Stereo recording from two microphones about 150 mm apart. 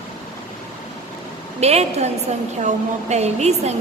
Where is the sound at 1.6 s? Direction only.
45° right (ahead or behind).